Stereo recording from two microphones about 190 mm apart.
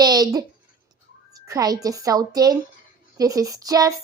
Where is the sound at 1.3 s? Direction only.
20° right (ahead or behind).